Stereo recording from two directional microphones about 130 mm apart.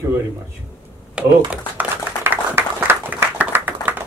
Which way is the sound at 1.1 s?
10° right (ahead or behind).